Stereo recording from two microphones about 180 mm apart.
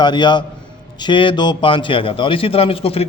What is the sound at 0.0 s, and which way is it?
A man's voice, 25° left (ahead or behind).